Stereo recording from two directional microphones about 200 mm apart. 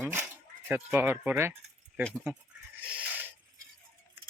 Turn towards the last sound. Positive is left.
turn(degrees=-10)  # may be behind; listen again after turning